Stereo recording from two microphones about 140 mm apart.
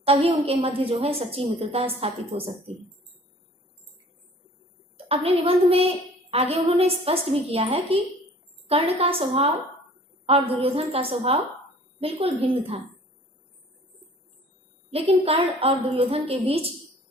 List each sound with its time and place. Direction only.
0.0 s a woman's voice: 45° right (ahead or behind)
5.0 s a woman's voice: 45° right (ahead or behind)
14.8 s a woman's voice: 45° right (ahead or behind)